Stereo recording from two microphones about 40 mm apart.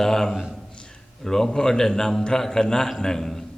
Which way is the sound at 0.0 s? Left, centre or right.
Centre.